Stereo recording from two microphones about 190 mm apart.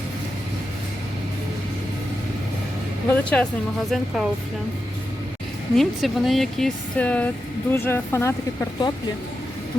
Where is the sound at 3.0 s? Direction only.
5° left (ahead or behind).